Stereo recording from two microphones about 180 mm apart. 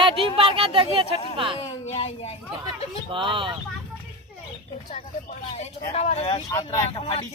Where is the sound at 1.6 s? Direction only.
35° left (ahead or behind).